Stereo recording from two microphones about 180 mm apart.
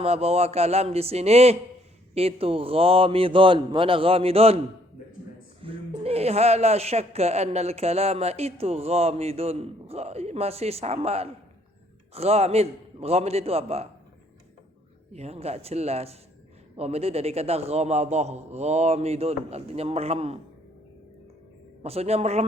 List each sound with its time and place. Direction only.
0.0 s a man's voice: 35° right (ahead or behind)
5.6 s a man's voice: 35° right (ahead or behind)
15.1 s a man's voice: 35° right (ahead or behind)
21.8 s a man's voice: 35° right (ahead or behind)